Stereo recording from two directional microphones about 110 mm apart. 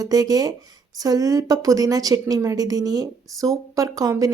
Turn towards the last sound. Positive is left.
turn(degrees=-30)  # may be behind; listen again after turning